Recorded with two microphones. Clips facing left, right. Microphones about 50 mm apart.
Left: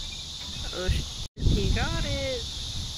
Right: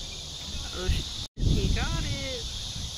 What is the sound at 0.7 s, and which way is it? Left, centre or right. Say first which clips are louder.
Speech: left 2 dB; left.